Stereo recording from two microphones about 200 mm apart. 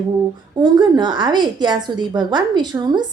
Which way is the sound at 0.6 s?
20° right (ahead or behind).